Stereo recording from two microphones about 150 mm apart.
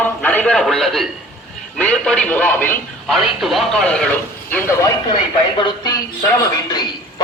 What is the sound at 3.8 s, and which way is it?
Speech, 10° left (ahead or behind).